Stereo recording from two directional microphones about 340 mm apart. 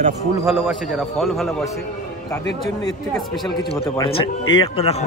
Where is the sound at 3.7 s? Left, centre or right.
Centre.